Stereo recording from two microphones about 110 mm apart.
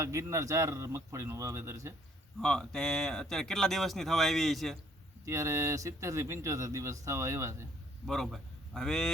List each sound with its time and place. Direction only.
0.0 s speech: 30° right (ahead or behind)
2.4 s speech: 5° left (ahead or behind)
5.2 s speech: 25° right (ahead or behind)
8.0 s speech: centre (ahead or behind)